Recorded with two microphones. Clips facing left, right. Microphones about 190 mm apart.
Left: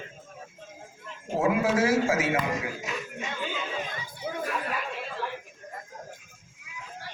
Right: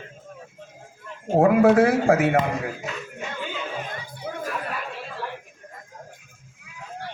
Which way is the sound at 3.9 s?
55° right (ahead or behind).